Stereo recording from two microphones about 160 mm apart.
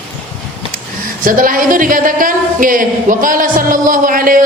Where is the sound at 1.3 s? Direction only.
60° right (ahead or behind).